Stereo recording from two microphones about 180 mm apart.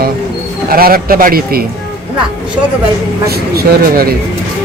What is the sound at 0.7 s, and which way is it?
Speech, 55° right (ahead or behind).